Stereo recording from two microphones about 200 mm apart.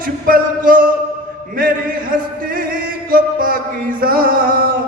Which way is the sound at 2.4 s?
45° right (ahead or behind).